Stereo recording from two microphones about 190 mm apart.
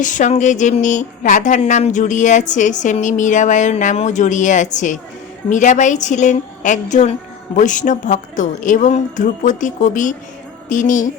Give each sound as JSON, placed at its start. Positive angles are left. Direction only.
{"t": 0.0, "sound": "speech", "side_deg": 40}